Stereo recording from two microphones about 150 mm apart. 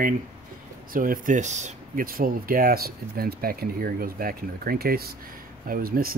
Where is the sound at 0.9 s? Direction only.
70° right (ahead or behind); by 2.0 s 50° right (ahead or behind).